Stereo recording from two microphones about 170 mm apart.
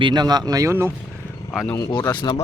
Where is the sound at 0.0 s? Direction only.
25° right (ahead or behind).